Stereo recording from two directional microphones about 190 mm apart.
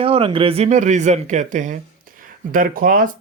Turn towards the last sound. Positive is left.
turn(degrees=-45)  # may be behind; listen again after turning